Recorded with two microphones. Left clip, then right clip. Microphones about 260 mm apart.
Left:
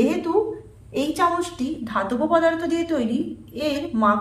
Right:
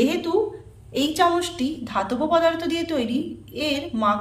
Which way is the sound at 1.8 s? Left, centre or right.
Centre.